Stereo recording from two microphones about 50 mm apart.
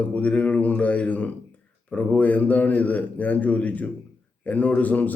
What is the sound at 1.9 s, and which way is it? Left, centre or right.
Speech, left.